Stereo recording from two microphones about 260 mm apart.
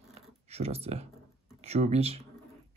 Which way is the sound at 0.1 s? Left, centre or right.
Right.